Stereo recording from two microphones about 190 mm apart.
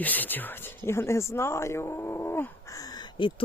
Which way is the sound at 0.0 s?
10° left (ahead or behind).